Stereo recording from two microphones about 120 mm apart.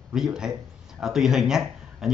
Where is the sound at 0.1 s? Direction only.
5° right (ahead or behind).